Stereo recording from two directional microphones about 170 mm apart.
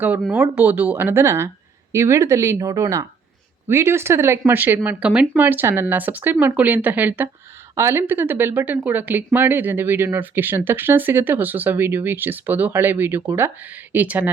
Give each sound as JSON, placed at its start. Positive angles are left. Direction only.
{"t": 0.0, "sound": "speech", "side_deg": -10}